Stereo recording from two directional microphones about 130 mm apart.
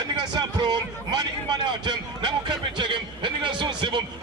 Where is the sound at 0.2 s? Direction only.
30° right (ahead or behind).